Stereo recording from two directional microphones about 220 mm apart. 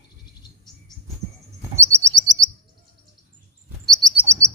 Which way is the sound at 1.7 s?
10° right (ahead or behind).